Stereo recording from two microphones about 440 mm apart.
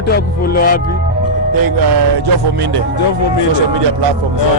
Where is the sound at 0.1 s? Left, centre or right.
Centre.